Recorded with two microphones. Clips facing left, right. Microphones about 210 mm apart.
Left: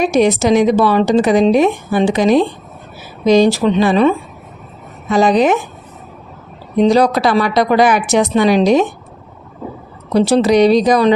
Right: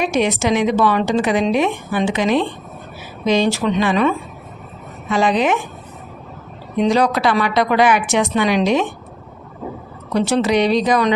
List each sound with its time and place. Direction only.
0.0 s a woman's voice: 40° left (ahead or behind)
6.7 s a woman's voice: 35° left (ahead or behind)
10.1 s a woman's voice: 35° left (ahead or behind)